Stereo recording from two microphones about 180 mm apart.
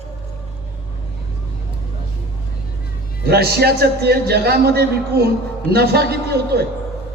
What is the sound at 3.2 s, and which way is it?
A man's voice, 65° right (ahead or behind).